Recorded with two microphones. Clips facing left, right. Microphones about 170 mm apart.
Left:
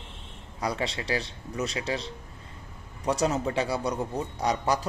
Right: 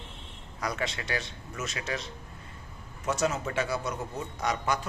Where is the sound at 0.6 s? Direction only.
30° left (ahead or behind).